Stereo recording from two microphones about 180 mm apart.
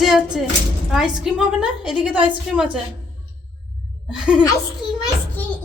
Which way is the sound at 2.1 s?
25° right (ahead or behind).